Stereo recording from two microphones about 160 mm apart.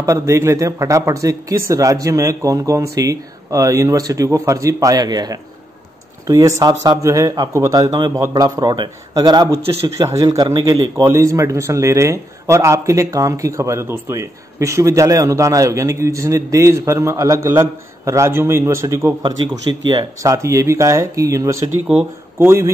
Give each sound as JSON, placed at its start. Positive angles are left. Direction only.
{"t": 0.0, "sound": "speech", "side_deg": -20}